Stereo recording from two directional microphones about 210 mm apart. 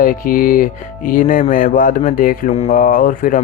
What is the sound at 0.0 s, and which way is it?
Speech, 40° left (ahead or behind).